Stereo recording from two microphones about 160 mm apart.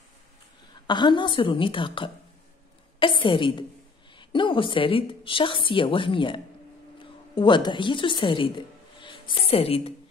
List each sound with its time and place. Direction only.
0.8 s speech: 30° left (ahead or behind)